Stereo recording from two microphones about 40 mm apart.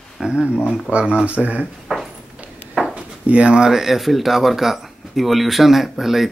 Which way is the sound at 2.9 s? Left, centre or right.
Right.